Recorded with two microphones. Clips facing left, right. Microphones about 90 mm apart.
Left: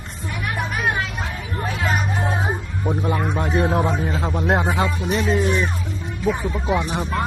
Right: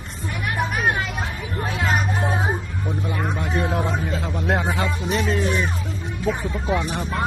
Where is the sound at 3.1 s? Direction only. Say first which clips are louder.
Left 3 dB; 35° left (ahead or behind).